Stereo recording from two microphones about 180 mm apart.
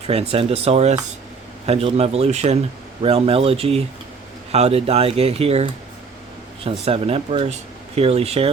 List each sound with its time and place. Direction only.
0.1 s speech: 35° right (ahead or behind)
6.7 s speech: 30° right (ahead or behind)